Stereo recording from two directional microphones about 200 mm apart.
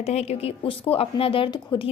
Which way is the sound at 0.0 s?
30° left (ahead or behind).